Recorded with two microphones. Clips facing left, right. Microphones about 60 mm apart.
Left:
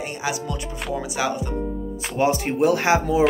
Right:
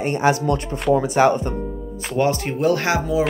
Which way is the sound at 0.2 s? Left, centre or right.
Right.